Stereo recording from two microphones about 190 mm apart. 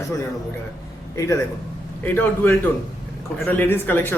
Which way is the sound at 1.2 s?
15° left (ahead or behind).